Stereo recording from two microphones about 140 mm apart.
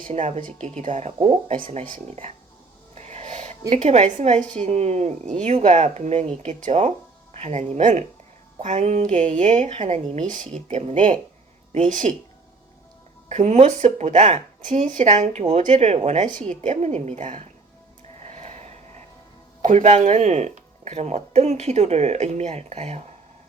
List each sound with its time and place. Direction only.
0.1 s speech: 55° right (ahead or behind)
2.9 s a sound: 55° right (ahead or behind)
3.7 s speech: 55° right (ahead or behind)
13.2 s speech: 55° right (ahead or behind)
18.2 s snort: 55° right (ahead or behind)
19.6 s speech: 60° right (ahead or behind)